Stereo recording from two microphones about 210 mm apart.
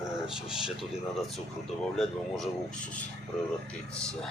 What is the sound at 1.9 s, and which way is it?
Speech, 5° left (ahead or behind).